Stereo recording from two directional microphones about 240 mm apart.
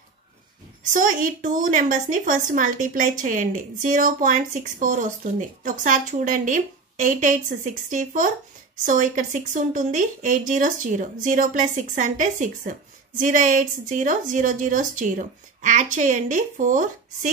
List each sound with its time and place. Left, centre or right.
0.8 s a woman's voice: right